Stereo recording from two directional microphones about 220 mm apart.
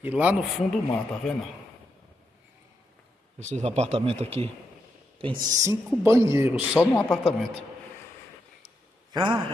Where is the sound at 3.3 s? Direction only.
30° right (ahead or behind); by 6.6 s 10° right (ahead or behind).